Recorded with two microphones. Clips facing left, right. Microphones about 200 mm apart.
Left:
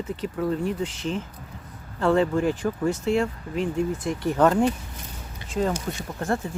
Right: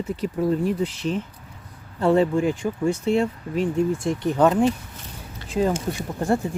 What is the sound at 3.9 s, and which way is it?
Speech, 25° right (ahead or behind).